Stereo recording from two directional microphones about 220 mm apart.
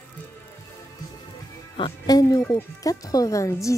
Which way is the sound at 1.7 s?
20° left (ahead or behind).